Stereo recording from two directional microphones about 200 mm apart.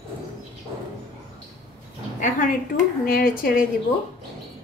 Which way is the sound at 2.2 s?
40° left (ahead or behind).